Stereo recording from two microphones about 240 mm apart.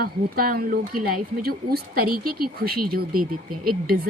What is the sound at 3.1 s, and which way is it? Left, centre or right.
Speech, right.